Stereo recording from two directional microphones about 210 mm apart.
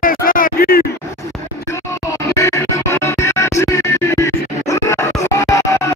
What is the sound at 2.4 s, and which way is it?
Music, 15° left (ahead or behind).